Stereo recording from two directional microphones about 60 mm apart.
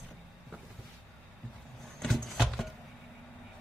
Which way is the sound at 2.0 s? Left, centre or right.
Centre.